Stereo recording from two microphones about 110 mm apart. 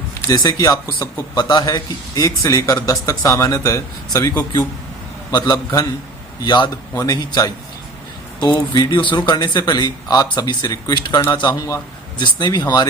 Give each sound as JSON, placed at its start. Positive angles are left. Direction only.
{"t": 0.3, "sound": "speech", "side_deg": 35}
{"t": 5.3, "sound": "a man's voice", "side_deg": 35}